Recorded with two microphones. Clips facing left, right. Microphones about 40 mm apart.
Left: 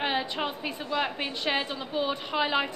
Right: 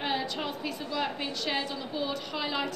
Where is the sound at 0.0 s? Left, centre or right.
Left.